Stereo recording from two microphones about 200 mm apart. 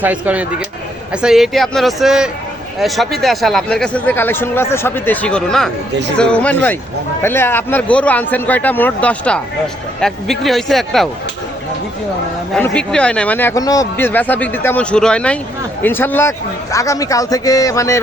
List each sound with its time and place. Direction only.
0.0 s a man's voice: 5° right (ahead or behind)
12.5 s a man's voice: 5° left (ahead or behind)